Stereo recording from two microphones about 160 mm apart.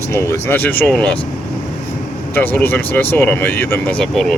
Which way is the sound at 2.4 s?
10° left (ahead or behind).